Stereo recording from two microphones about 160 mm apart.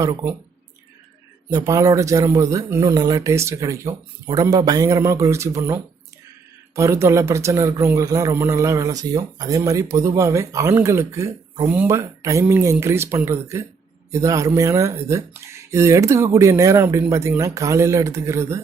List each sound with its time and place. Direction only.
0.0 s speech: 25° right (ahead or behind)
1.5 s speech: 20° right (ahead or behind)